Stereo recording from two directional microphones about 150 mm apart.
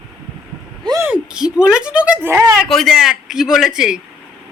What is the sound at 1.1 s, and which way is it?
Speech, 5° right (ahead or behind).